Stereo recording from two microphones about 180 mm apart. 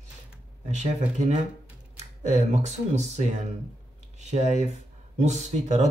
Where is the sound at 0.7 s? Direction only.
40° right (ahead or behind).